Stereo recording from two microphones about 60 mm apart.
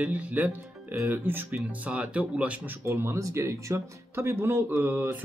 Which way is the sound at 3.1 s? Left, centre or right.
Right.